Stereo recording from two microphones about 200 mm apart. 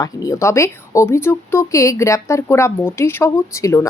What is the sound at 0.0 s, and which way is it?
Speech, 15° left (ahead or behind).